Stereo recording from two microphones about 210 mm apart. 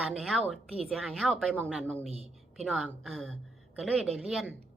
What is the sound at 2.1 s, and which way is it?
Speech, 30° right (ahead or behind).